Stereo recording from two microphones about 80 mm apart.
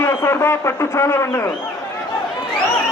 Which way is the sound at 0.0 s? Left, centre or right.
Left.